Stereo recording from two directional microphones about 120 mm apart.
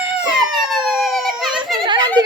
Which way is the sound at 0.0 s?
10° right (ahead or behind).